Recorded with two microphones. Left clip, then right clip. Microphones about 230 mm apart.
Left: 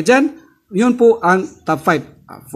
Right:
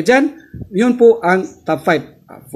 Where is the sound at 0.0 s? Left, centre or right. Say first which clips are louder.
Even; centre.